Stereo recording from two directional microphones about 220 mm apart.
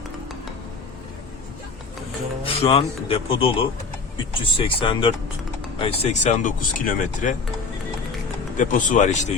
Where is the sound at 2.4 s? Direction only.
25° left (ahead or behind).